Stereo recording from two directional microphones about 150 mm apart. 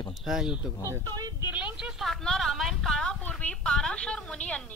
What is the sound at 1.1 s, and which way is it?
Speech, 25° right (ahead or behind).